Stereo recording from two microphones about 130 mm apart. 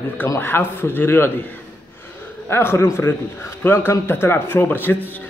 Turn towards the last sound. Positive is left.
turn(degrees=15)  # may be behind; listen again after turning